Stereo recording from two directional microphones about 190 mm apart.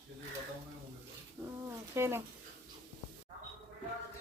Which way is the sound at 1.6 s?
15° right (ahead or behind).